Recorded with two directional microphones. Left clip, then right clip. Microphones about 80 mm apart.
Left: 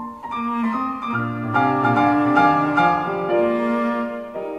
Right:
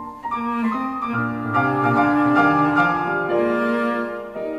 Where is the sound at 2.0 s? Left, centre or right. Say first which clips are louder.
Left 1 dB; right.